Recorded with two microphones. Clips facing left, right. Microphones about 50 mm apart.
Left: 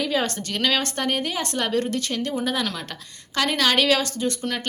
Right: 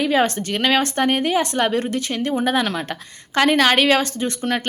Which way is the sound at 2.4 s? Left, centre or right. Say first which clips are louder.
Right 6 dB; right.